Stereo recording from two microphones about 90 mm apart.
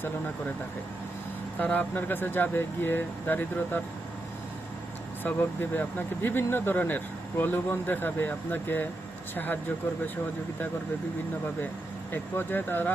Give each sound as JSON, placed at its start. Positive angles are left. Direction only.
{"t": 1.5, "sound": "speech", "side_deg": 15}
{"t": 5.7, "sound": "speech", "side_deg": 20}
{"t": 12.1, "sound": "speech", "side_deg": 20}